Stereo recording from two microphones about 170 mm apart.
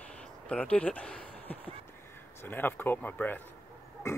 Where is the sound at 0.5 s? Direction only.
5° left (ahead or behind).